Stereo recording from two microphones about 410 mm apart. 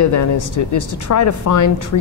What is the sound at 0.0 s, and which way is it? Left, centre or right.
Speech, left.